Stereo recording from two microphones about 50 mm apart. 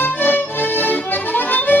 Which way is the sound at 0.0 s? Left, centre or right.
Left.